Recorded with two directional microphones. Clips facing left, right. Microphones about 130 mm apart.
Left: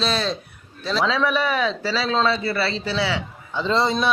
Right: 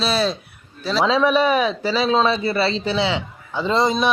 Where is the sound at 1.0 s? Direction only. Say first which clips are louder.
Right 5 dB; 20° right (ahead or behind).